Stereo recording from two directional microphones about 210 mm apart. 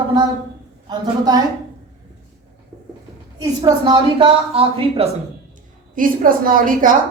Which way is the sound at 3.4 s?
20° right (ahead or behind).